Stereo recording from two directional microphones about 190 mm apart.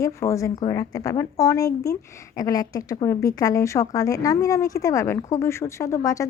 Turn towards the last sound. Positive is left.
turn(degrees=15)  # may be behind; listen again after turning